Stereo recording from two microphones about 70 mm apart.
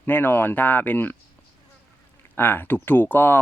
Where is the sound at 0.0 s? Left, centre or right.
Left.